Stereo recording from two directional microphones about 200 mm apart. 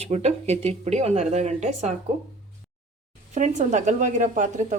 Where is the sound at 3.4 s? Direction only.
35° right (ahead or behind).